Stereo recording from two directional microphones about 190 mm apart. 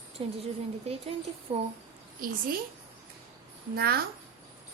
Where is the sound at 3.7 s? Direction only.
55° right (ahead or behind).